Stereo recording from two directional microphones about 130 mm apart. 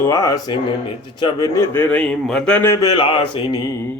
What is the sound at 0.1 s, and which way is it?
Speech, 25° left (ahead or behind).